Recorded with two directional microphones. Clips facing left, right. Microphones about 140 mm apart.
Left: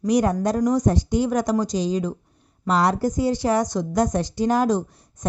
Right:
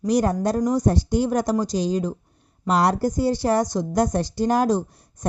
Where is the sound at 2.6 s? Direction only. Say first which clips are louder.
Even; 35° right (ahead or behind).